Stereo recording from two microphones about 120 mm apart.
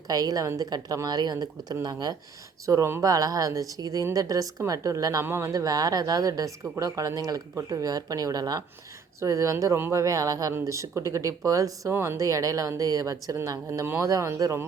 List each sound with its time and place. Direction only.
0.1 s a woman's voice: 30° right (ahead or behind)